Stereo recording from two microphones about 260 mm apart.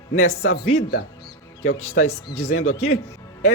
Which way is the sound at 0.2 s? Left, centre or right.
Left.